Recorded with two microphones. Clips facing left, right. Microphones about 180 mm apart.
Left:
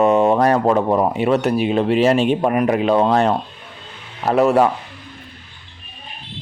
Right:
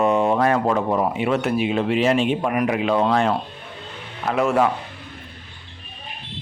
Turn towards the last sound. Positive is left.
turn(degrees=40)  # may be behind; listen again after turning